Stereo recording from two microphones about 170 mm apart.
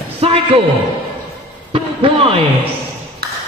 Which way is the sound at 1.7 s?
30° right (ahead or behind).